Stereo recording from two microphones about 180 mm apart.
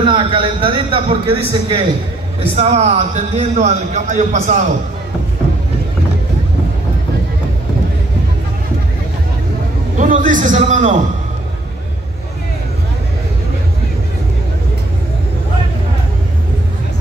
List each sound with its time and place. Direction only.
0.0 s a man's voice: 30° right (ahead or behind)
9.9 s a man's voice: 45° right (ahead or behind)